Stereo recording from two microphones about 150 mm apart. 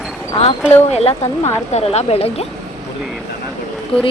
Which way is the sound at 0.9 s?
45° left (ahead or behind).